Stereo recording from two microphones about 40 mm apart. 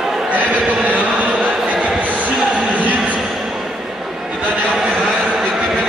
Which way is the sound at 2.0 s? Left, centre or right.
Right.